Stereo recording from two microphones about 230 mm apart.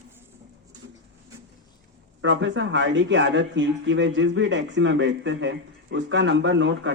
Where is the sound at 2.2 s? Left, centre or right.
Right.